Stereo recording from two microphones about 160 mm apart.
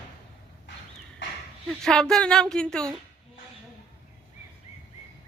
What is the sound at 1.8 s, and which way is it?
Speech, 5° left (ahead or behind).